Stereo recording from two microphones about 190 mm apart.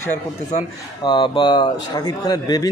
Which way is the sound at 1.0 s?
25° left (ahead or behind).